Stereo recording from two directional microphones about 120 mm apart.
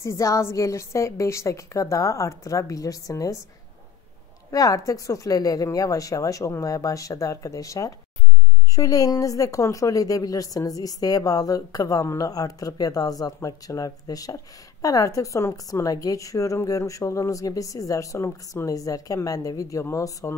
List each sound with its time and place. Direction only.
0.0 s a woman's voice: 25° left (ahead or behind)
4.5 s a woman's voice: 30° left (ahead or behind)